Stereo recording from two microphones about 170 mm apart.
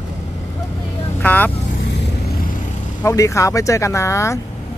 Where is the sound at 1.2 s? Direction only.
10° left (ahead or behind).